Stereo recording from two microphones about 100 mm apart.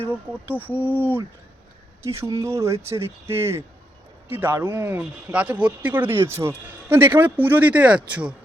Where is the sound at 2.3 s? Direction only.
30° right (ahead or behind).